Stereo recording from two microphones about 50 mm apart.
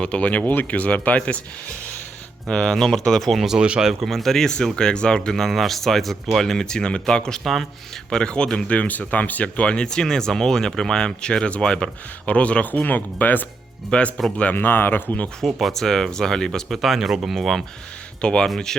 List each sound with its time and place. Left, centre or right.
0.0 s speech: left
2.5 s speech: centre
3.4 s speech: centre
4.0 s speech: centre
5.3 s speech: centre
7.4 s speech: centre
8.1 s speech: centre; by 13.4 s left
13.9 s speech: left
14.5 s speech: left
15.4 s speech: centre
18.2 s speech: centre
18.4 s speech: centre